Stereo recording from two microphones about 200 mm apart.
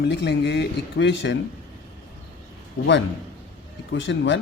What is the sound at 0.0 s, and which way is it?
Speech, 60° left (ahead or behind).